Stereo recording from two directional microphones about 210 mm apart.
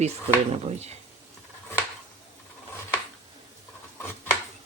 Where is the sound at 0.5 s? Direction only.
30° right (ahead or behind).